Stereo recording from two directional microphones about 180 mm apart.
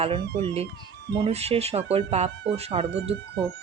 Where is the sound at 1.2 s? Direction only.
35° right (ahead or behind).